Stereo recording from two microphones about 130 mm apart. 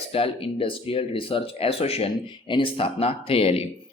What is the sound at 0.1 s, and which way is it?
Speech, 45° left (ahead or behind).